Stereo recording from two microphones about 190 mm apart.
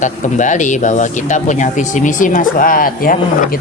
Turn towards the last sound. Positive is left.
turn(degrees=50)  # may be behind; listen again after turning